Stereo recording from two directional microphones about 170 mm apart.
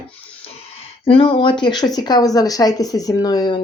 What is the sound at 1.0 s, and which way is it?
Speech, 30° left (ahead or behind).